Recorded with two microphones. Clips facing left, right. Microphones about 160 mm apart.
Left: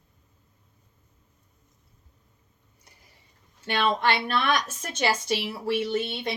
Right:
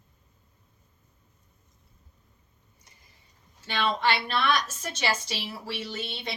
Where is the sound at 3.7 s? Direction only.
55° left (ahead or behind).